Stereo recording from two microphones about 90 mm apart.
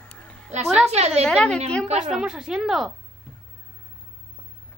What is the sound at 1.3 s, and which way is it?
Speech, 10° left (ahead or behind).